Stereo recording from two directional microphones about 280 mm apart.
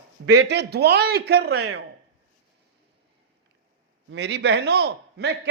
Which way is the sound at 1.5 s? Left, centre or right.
Right.